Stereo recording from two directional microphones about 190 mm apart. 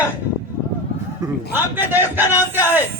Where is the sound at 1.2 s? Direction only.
20° right (ahead or behind).